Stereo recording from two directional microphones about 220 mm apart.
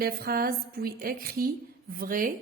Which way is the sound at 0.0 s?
45° right (ahead or behind).